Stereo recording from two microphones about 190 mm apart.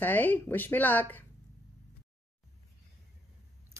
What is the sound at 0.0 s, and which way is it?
Speech, 10° left (ahead or behind).